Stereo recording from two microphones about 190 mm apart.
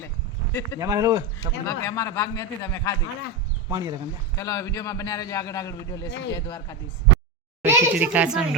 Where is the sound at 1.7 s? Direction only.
15° left (ahead or behind).